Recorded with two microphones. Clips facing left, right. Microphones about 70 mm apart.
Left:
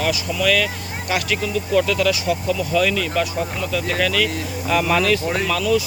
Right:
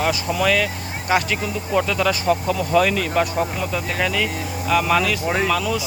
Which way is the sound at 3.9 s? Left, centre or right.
Centre.